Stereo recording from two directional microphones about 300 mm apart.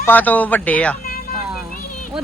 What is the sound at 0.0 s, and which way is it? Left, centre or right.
Speech, centre.